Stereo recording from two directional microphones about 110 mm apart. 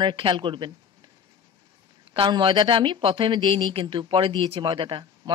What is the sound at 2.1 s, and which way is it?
Speech, 45° right (ahead or behind).